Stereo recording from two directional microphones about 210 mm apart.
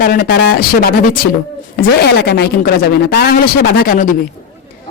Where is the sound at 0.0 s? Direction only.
45° left (ahead or behind).